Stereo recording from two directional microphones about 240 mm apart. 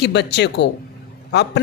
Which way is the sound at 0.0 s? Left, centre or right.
Left.